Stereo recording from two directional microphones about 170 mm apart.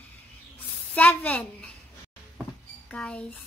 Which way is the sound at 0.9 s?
10° left (ahead or behind).